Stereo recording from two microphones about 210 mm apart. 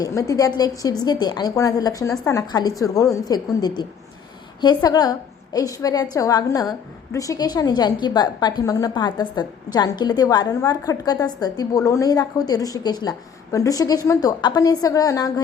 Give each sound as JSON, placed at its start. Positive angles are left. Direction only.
{"t": 0.0, "sound": "a woman's voice", "side_deg": 15}